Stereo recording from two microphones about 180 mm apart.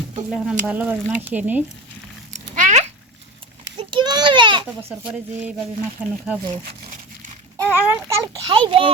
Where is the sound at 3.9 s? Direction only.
25° right (ahead or behind).